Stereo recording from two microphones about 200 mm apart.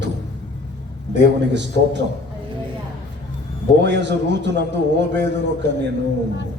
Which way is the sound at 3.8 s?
60° right (ahead or behind).